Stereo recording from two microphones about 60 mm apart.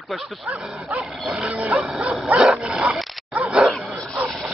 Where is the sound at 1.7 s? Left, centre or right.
Centre.